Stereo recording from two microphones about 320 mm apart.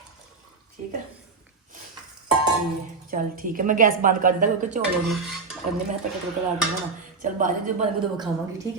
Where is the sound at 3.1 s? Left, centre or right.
Right.